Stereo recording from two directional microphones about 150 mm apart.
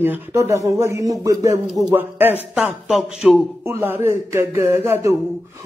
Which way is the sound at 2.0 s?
15° right (ahead or behind).